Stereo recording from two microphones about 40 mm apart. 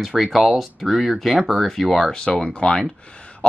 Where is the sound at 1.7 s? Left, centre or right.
Centre.